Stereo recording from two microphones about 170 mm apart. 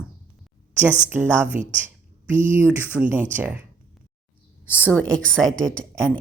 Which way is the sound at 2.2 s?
50° right (ahead or behind).